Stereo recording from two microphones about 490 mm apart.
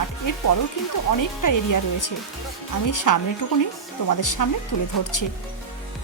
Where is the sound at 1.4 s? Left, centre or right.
Left.